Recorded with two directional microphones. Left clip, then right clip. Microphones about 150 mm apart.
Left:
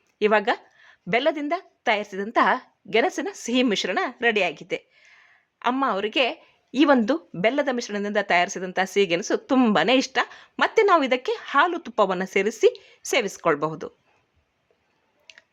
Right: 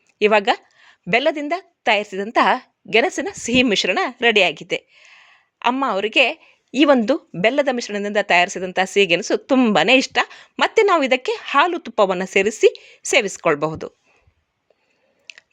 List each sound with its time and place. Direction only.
0.2 s a woman's voice: 20° right (ahead or behind)
15.3 s clicking: 20° right (ahead or behind)